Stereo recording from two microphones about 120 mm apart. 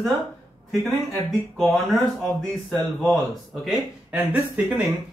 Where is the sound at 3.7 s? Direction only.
10° right (ahead or behind).